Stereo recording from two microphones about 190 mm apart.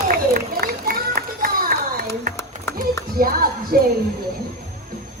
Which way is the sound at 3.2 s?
50° right (ahead or behind).